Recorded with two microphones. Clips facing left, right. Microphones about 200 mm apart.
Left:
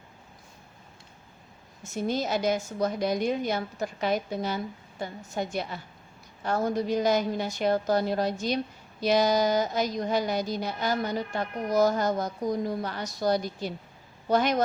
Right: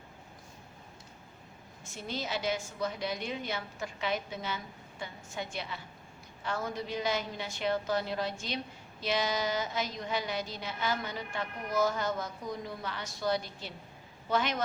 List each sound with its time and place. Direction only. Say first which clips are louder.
1.8 s a woman's voice: left 10 dB; 45° left (ahead or behind)